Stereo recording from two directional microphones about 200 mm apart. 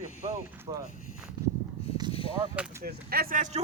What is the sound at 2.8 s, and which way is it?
Speech, 50° right (ahead or behind).